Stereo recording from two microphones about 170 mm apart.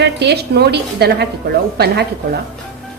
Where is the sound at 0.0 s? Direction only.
75° right (ahead or behind).